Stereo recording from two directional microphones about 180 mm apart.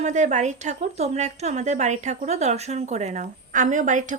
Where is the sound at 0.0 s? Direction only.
40° right (ahead or behind).